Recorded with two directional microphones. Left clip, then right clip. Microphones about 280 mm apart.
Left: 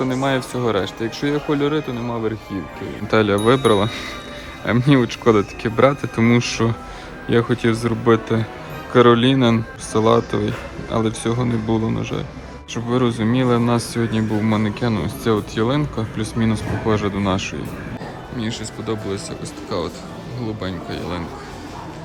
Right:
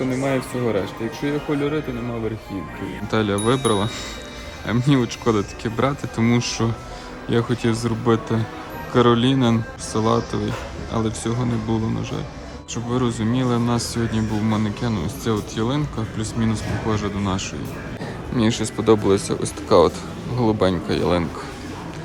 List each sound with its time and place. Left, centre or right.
0.1 s speech: centre
3.1 s speech: centre
18.3 s speech: centre